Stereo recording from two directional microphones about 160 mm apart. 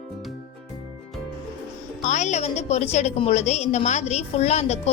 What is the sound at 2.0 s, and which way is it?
A woman's voice, 45° left (ahead or behind).